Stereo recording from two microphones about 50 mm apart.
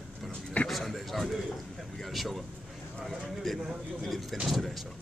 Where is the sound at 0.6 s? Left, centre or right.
Centre.